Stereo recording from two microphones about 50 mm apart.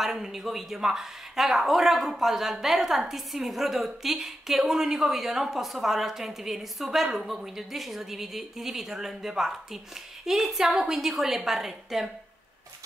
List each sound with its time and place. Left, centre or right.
0.0 s speech: centre